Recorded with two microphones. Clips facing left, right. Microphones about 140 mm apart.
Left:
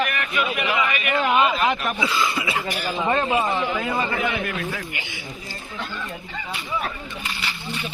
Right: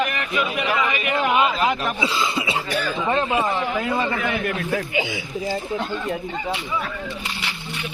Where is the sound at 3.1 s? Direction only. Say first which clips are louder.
Even; centre (ahead or behind).